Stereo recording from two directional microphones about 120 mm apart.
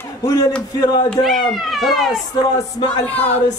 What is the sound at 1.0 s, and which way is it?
Speech, centre (ahead or behind).